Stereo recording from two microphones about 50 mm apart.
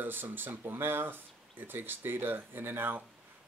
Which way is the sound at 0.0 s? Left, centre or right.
Right.